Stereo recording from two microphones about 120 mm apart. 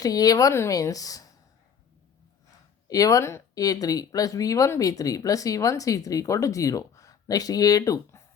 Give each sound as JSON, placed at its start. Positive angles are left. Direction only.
{"t": 0.0, "sound": "speech", "side_deg": 30}
{"t": 2.8, "sound": "speech", "side_deg": 30}